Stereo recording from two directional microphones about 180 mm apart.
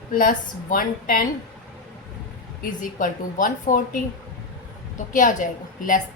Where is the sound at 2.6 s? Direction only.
50° left (ahead or behind).